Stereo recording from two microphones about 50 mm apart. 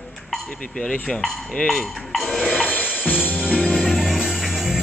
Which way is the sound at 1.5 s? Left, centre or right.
Left.